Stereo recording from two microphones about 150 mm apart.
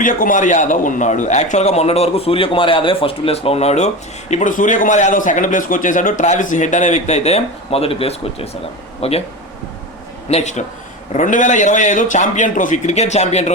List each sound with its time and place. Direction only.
0.0 s a man's voice: 60° left (ahead or behind); by 3.8 s 45° left (ahead or behind)
4.3 s a man's voice: 60° left (ahead or behind); by 9.2 s 40° left (ahead or behind)
10.2 s a man's voice: 50° left (ahead or behind)